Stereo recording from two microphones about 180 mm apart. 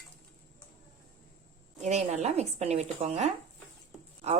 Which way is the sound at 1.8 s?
40° right (ahead or behind).